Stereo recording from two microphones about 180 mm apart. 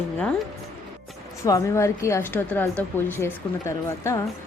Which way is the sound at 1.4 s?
15° left (ahead or behind).